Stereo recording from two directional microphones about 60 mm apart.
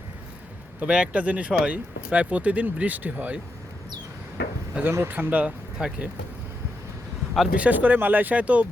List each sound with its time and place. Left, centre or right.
0.8 s speech: centre
4.8 s speech: right
5.1 s speech: right
7.5 s speech: right